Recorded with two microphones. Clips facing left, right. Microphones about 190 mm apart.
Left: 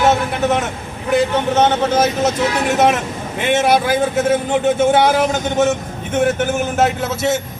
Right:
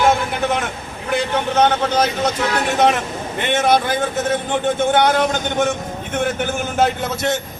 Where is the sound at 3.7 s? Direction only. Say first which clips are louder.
Left 2 dB; 5° left (ahead or behind).